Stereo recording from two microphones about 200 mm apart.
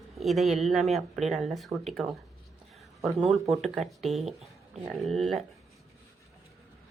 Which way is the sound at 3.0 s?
Centre (ahead or behind).